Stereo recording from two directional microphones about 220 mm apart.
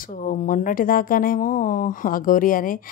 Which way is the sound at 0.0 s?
40° left (ahead or behind).